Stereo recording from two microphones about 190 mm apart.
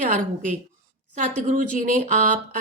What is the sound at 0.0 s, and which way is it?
A woman's voice, 40° right (ahead or behind).